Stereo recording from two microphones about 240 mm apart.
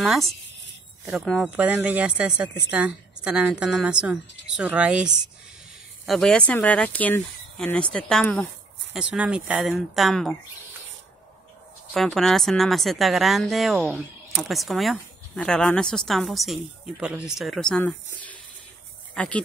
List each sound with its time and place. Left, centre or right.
0.0 s speech: centre
11.9 s speech: centre